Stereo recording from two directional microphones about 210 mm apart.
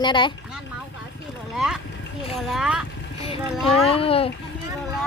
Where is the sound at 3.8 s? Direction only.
25° left (ahead or behind).